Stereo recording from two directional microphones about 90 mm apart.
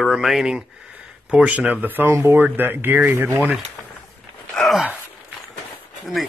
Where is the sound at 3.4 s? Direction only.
10° right (ahead or behind).